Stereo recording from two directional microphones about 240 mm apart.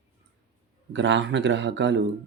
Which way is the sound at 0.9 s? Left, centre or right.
Right.